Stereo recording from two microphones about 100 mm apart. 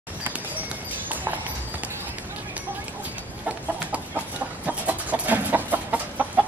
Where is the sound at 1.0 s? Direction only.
15° right (ahead or behind).